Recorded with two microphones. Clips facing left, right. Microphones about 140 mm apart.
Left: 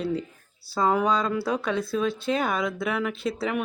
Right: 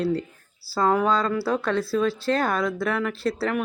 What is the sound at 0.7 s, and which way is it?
Speech, 15° left (ahead or behind).